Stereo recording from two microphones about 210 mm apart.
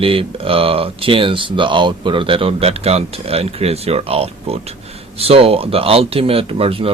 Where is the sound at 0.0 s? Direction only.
25° right (ahead or behind).